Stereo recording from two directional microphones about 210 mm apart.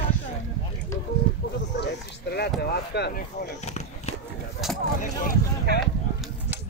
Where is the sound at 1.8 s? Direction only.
50° left (ahead or behind).